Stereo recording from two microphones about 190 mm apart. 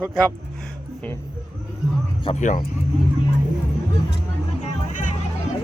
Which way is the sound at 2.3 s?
40° left (ahead or behind).